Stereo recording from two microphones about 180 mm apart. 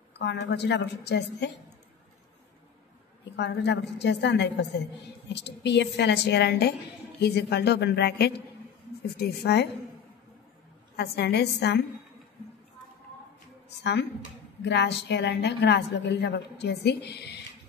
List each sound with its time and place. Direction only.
0.2 s a woman's voice: 70° left (ahead or behind)
3.3 s a woman's voice: 70° left (ahead or behind)
11.0 s a woman's voice: 65° left (ahead or behind)
13.7 s a woman's voice: 70° left (ahead or behind)